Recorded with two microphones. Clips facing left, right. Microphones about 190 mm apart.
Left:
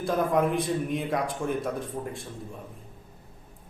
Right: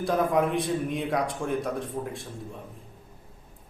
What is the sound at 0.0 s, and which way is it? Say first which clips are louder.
A man's voice: even; centre (ahead or behind).